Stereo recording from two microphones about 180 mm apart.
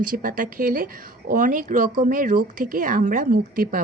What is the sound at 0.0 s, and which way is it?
A woman's voice, 50° right (ahead or behind).